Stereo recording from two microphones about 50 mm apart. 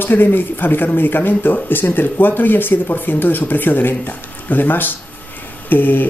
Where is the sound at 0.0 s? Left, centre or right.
Left.